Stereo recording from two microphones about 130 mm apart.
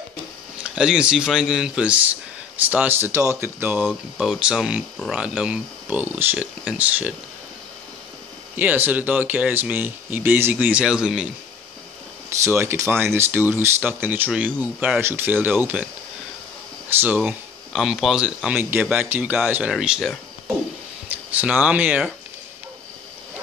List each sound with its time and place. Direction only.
0.7 s speech: 5° right (ahead or behind)
4.2 s speech: 5° right (ahead or behind)
8.5 s speech: 15° right (ahead or behind)
12.3 s speech: 20° right (ahead or behind)
17.2 s speech: 5° right (ahead or behind)
21.3 s speech: 10° right (ahead or behind)